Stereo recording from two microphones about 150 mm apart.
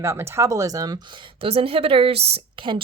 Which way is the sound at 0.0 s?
15° right (ahead or behind).